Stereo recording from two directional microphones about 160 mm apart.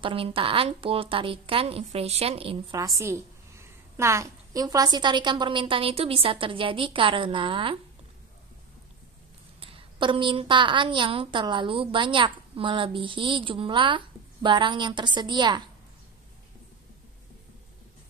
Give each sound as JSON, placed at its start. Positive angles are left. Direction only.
{"t": 0.0, "sound": "a woman's voice", "side_deg": -35}
{"t": 2.7, "sound": "a woman's voice", "side_deg": -20}
{"t": 9.6, "sound": "a woman's voice", "side_deg": -35}